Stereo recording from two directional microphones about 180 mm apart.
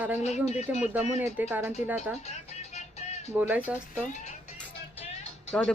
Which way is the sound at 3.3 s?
10° right (ahead or behind).